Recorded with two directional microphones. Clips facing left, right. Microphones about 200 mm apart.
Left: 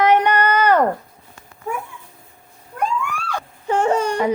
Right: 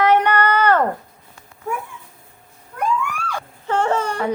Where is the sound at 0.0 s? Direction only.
15° left (ahead or behind).